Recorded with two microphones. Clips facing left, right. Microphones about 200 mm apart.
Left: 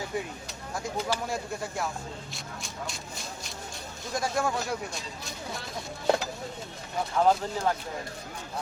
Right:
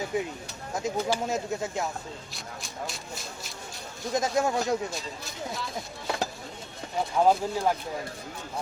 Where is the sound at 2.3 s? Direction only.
Centre (ahead or behind).